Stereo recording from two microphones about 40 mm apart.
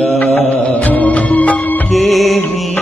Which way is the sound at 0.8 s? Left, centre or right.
Left.